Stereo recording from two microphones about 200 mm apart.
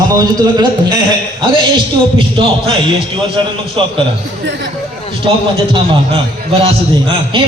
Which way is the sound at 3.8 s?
25° right (ahead or behind).